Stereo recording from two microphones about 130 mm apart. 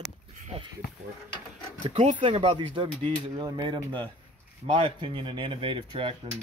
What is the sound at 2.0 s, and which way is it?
Speech, 40° right (ahead or behind).